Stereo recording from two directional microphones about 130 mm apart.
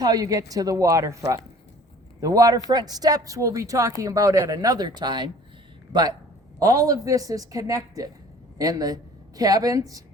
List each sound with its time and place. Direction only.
0.0 s a woman's voice: 30° right (ahead or behind)